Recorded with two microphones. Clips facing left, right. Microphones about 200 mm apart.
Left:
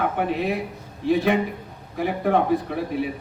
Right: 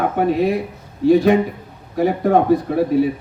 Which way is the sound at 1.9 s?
40° right (ahead or behind).